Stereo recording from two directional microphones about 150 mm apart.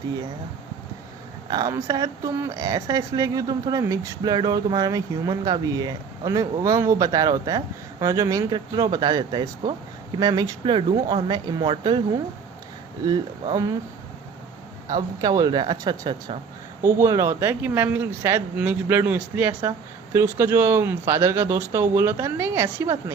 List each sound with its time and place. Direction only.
1.5 s speech: 25° right (ahead or behind)
13.1 s speech: 25° right (ahead or behind)
14.9 s speech: 25° right (ahead or behind)